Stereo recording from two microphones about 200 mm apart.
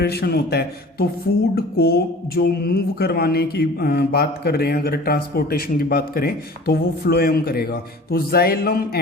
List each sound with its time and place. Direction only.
0.0 s speech: 50° left (ahead or behind)